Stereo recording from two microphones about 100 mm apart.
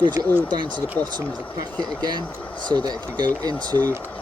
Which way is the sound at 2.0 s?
45° right (ahead or behind).